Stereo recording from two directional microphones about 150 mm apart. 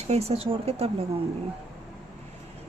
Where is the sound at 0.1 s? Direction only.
45° right (ahead or behind).